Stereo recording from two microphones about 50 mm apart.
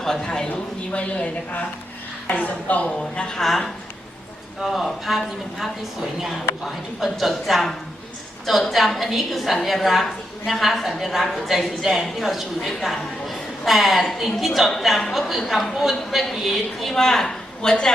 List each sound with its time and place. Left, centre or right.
0.0 s a woman's voice: centre; by 2.9 s left
3.0 s a woman's voice: centre
4.6 s a woman's voice: centre
7.0 s a woman's voice: centre